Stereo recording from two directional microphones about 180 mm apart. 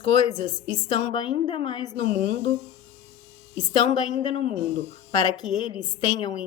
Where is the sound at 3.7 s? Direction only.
25° left (ahead or behind).